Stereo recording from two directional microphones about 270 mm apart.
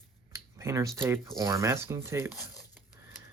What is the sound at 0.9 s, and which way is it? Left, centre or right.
Speech, centre.